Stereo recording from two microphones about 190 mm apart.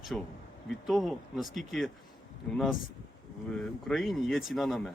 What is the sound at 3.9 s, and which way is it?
Speech, centre (ahead or behind).